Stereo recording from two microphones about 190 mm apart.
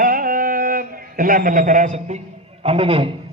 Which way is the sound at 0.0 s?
50° right (ahead or behind).